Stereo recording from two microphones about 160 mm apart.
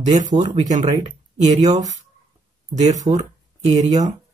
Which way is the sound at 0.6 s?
50° right (ahead or behind).